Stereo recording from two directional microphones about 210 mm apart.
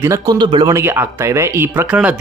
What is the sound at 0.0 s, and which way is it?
A man's voice, 15° right (ahead or behind).